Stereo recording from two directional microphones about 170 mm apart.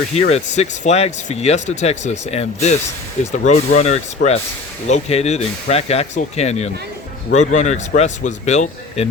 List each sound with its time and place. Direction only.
0.1 s speech: 40° left (ahead or behind)